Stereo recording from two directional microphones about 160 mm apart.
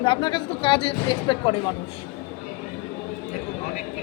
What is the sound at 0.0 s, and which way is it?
A woman's voice, 30° left (ahead or behind).